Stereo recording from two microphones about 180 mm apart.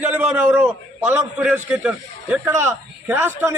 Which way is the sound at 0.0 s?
10° right (ahead or behind).